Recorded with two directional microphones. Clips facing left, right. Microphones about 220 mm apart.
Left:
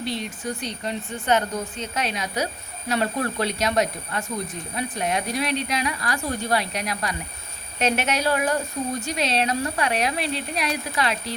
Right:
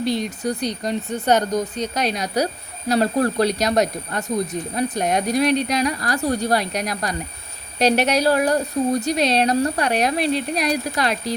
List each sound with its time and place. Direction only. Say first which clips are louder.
0.0 s a woman's voice: right 7 dB; 40° right (ahead or behind)